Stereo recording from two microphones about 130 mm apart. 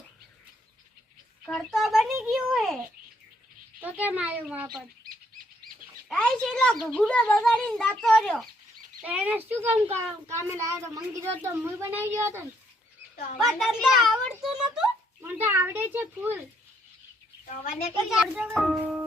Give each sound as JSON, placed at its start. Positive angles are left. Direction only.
{"t": 1.5, "sound": "a child's voice", "side_deg": 0}
{"t": 2.3, "sound": "a sound", "side_deg": 0}
{"t": 3.8, "sound": "a child's voice", "side_deg": -10}
{"t": 6.1, "sound": "a child's voice", "side_deg": 5}
{"t": 9.0, "sound": "a child's voice", "side_deg": -10}
{"t": 13.4, "sound": "a child's voice", "side_deg": 0}
{"t": 15.2, "sound": "a child's voice", "side_deg": -15}
{"t": 18.1, "sound": "a child's voice", "side_deg": 0}